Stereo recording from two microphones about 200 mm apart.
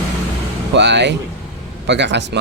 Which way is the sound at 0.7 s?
60° right (ahead or behind).